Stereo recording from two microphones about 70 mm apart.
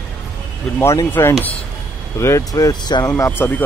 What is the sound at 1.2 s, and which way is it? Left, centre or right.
Speech, left.